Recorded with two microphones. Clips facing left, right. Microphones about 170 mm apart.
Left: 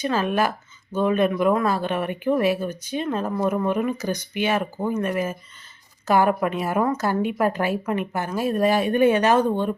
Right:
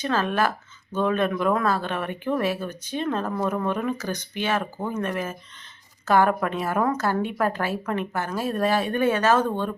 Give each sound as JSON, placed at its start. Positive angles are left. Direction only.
{"t": 0.0, "sound": "speech", "side_deg": 10}